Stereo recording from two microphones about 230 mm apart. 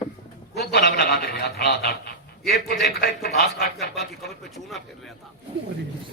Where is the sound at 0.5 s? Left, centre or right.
Left.